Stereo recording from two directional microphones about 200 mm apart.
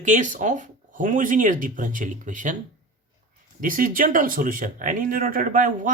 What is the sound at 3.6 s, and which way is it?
Speech, 45° right (ahead or behind).